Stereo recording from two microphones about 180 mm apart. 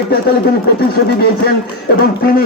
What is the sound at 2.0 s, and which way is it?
Speech, 55° left (ahead or behind).